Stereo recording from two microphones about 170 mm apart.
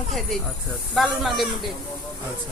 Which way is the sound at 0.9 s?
Centre (ahead or behind).